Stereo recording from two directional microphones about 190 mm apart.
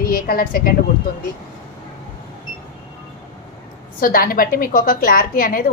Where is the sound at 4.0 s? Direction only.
50° left (ahead or behind).